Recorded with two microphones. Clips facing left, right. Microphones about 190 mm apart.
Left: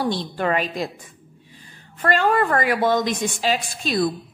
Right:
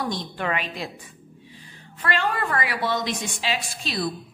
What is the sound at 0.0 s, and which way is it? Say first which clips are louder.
Speech: left 5 dB; 30° left (ahead or behind).